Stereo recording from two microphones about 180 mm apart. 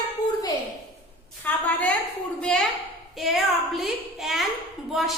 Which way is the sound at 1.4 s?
5° left (ahead or behind).